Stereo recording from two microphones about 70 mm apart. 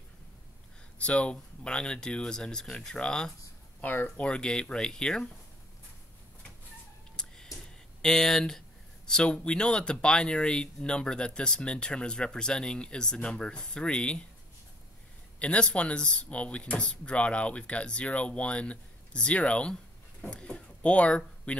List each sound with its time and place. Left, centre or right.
0.9 s speech: centre
3.8 s speech: left
4.3 s speech: centre
7.2 s a sound: centre
7.6 s speech: centre
15.3 s speech: centre